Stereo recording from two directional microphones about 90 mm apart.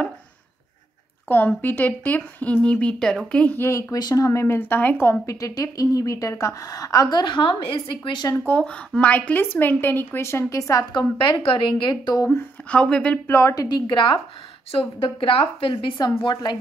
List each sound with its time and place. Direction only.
1.3 s a woman's voice: 20° left (ahead or behind)
3.5 s speech: 25° left (ahead or behind)
3.9 s speech: 40° left (ahead or behind); by 5.1 s 20° left (ahead or behind)
5.2 s a woman's voice: 40° left (ahead or behind); by 8.3 s 65° left (ahead or behind)
8.5 s speech: 15° left (ahead or behind)
10.5 s a woman's voice: 40° left (ahead or behind)
10.9 s a woman's voice: 55° left (ahead or behind)
11.2 s a woman's voice: 80° left; by 12.2 s 60° left (ahead or behind)
12.6 s a woman's voice: 10° left (ahead or behind)
13.3 s a woman's voice: 30° left (ahead or behind)
13.7 s a woman's voice: 60° left (ahead or behind)
14.7 s a woman's voice: 90° left; by 16.5 s 60° left (ahead or behind)